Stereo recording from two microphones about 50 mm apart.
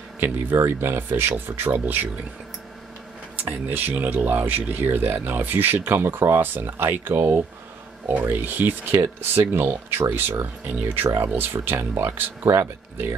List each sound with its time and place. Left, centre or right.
0.7 s speech: right
3.3 s speech: right